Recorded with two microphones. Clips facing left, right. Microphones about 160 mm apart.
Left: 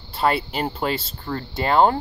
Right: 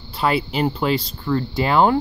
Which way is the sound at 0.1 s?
45° left (ahead or behind).